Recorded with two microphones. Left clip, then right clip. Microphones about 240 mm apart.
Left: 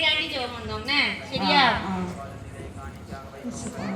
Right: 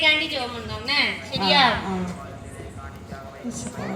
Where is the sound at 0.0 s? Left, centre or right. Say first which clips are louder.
Right 3 dB; right.